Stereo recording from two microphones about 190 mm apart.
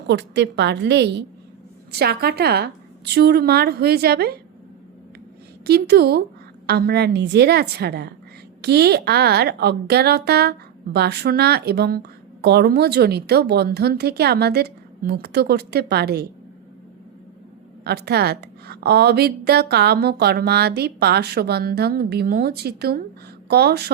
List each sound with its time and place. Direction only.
0.1 s a woman's voice: 65° right (ahead or behind)
5.6 s a woman's voice: 60° right (ahead or behind)
17.8 s a woman's voice: 60° right (ahead or behind)